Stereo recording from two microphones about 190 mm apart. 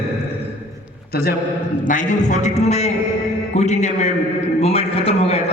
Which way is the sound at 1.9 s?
40° left (ahead or behind).